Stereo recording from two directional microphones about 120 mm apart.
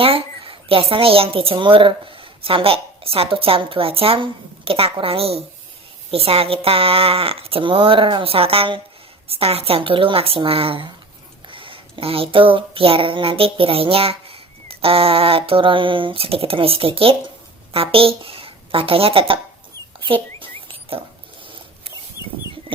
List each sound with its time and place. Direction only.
0.0 s a woman's voice: 50° right (ahead or behind)
20.4 s rodents: 45° right (ahead or behind)
21.4 s a sound: 45° right (ahead or behind)